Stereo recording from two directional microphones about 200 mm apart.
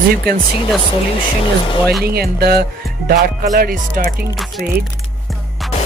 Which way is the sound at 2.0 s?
50° right (ahead or behind).